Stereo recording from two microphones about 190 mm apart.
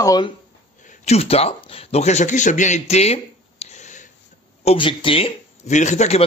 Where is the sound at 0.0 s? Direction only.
20° left (ahead or behind).